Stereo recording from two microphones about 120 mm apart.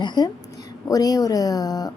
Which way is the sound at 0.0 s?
40° left (ahead or behind).